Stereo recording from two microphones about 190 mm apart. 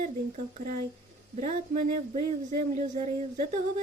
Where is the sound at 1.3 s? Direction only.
35° right (ahead or behind).